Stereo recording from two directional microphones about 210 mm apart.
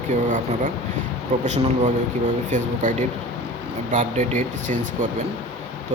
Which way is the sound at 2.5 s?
35° right (ahead or behind).